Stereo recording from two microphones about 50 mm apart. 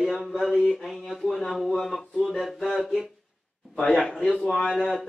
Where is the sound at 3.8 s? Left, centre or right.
Centre.